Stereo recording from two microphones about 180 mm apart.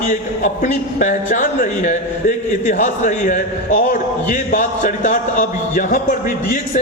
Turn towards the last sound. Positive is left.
turn(degrees=50)  # may be behind; listen again after turning